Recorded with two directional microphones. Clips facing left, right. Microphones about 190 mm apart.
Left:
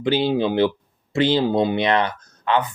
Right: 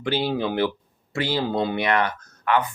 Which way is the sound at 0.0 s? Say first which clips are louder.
Left 5 dB; 20° left (ahead or behind).